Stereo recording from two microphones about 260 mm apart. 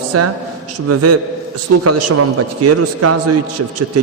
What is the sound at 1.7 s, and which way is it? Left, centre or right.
Speech, right.